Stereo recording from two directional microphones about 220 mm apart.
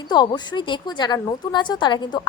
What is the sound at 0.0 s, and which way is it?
Speech, 20° left (ahead or behind).